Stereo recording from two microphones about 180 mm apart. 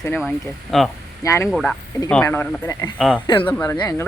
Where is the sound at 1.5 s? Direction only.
Centre (ahead or behind).